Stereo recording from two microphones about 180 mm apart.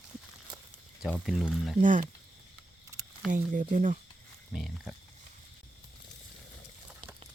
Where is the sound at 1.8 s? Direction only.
45° right (ahead or behind).